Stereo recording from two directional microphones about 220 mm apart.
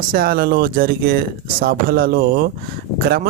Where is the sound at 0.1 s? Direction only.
40° right (ahead or behind).